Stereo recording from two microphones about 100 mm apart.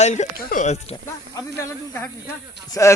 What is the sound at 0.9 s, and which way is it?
Speech, 90° left.